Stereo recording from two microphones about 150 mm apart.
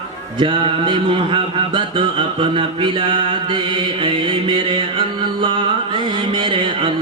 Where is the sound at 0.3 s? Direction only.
35° right (ahead or behind).